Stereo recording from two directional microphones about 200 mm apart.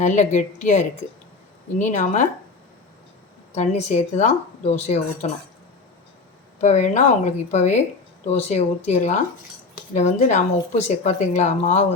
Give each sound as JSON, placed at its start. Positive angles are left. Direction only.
{"t": 0.0, "sound": "speech", "side_deg": 35}
{"t": 3.5, "sound": "speech", "side_deg": 35}
{"t": 6.6, "sound": "speech", "side_deg": 35}